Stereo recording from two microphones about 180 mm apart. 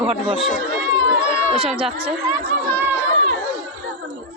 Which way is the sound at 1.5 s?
30° right (ahead or behind).